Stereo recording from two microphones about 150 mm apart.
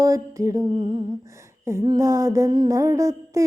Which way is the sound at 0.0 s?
20° right (ahead or behind).